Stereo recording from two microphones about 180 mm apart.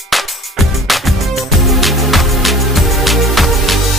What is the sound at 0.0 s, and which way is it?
Music, centre (ahead or behind).